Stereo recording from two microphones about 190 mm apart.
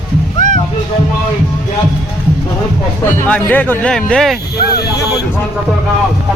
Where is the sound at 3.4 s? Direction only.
10° left (ahead or behind).